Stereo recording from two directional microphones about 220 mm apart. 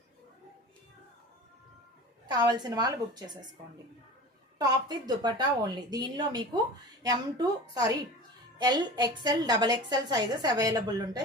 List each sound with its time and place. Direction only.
2.2 s a woman's voice: 20° right (ahead or behind)
4.5 s a woman's voice: 20° right (ahead or behind)